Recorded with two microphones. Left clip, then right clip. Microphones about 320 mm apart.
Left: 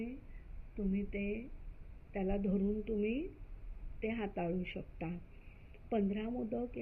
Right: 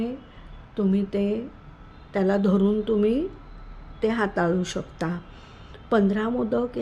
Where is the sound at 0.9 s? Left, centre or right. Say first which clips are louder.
Right 13 dB; right.